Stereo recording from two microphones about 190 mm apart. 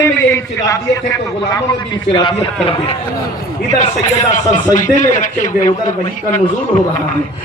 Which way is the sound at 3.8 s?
40° left (ahead or behind).